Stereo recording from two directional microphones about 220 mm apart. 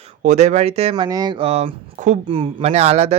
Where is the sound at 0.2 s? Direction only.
30° right (ahead or behind).